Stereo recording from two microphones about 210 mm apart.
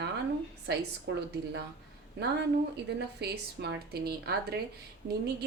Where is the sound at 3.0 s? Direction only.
50° right (ahead or behind).